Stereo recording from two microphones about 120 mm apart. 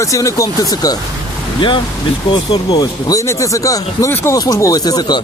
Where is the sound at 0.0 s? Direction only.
25° left (ahead or behind).